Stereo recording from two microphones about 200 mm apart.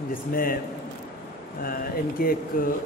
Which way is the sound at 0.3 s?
45° left (ahead or behind).